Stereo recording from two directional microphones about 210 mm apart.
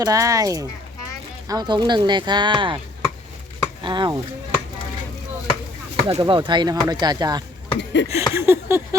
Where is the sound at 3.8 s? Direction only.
20° right (ahead or behind).